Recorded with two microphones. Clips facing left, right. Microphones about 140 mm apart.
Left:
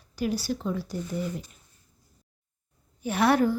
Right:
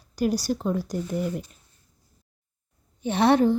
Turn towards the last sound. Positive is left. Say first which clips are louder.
# right 3 dB
turn(degrees=-25)  # may be behind; listen again after turning